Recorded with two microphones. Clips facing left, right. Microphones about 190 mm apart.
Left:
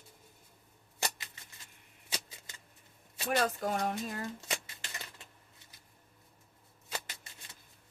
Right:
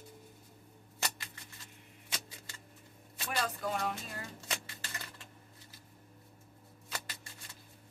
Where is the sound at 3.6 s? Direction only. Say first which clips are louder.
Left 3 dB; 45° left (ahead or behind).